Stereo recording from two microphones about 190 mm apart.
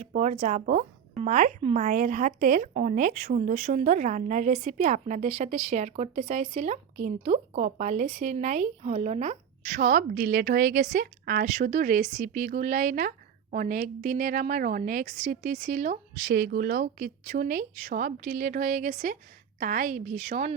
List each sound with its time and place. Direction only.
0.0 s speech: 35° right (ahead or behind)
16.3 s speech: 55° right (ahead or behind); by 20.6 s 40° right (ahead or behind)